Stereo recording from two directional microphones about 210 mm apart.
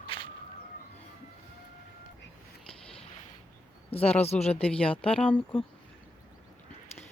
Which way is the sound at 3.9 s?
30° left (ahead or behind).